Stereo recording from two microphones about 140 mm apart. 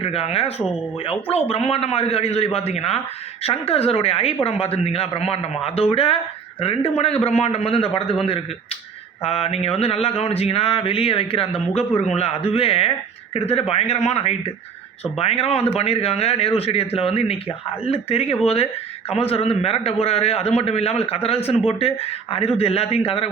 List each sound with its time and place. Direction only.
0.0 s speech: 45° left (ahead or behind)
9.2 s speech: 45° left (ahead or behind)